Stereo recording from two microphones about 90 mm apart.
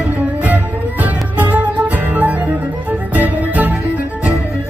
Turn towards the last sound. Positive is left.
turn(degrees=-15)  # may be behind; listen again after turning